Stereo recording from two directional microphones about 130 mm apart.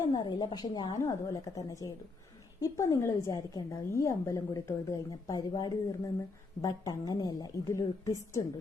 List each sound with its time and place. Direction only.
0.1 s a woman's voice: 35° left (ahead or behind)